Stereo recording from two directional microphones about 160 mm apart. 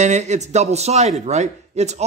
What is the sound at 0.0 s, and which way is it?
A man's voice, 45° right (ahead or behind).